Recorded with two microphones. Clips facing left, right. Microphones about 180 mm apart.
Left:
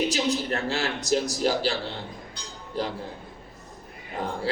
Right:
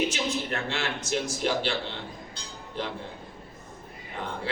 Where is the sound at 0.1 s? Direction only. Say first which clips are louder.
Left 4 dB; 40° left (ahead or behind).